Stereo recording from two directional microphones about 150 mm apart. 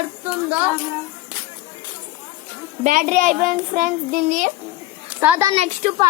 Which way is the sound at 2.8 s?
60° right (ahead or behind).